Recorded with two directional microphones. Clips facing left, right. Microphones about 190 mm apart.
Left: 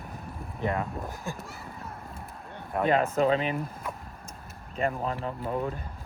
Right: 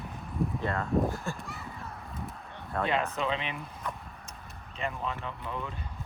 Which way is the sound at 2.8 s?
45° left (ahead or behind).